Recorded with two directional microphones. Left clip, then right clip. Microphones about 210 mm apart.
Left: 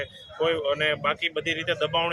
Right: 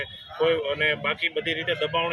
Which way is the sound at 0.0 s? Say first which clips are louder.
Right 2 dB; 10° left (ahead or behind).